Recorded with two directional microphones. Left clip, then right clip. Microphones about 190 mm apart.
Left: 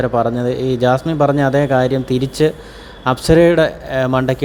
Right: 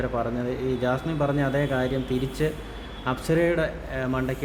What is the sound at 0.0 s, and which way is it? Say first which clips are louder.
A man's voice: left 11 dB; 35° left (ahead or behind).